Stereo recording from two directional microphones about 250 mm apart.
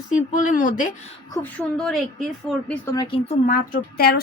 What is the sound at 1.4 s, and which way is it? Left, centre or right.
Speech, centre.